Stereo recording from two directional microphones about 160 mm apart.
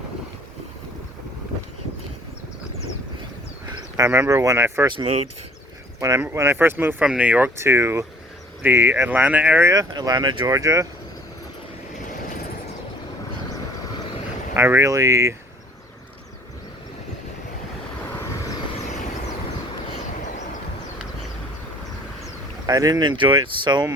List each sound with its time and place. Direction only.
3.9 s speech: 20° right (ahead or behind)
4.9 s speech: 30° right (ahead or behind)
6.0 s speech: 15° right (ahead or behind)
9.9 s speech: 25° right (ahead or behind)
14.5 s speech: 15° right (ahead or behind)
22.6 s speech: 25° right (ahead or behind)